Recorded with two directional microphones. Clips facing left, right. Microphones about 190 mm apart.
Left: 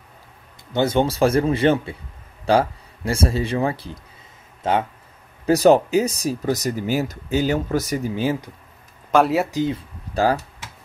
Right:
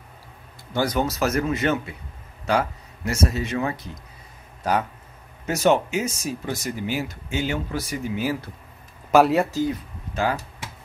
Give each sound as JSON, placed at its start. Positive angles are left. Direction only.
{"t": 0.7, "sound": "speech", "side_deg": 25}
{"t": 5.4, "sound": "speech", "side_deg": 35}
{"t": 9.1, "sound": "speech", "side_deg": 0}
{"t": 9.5, "sound": "speech", "side_deg": 25}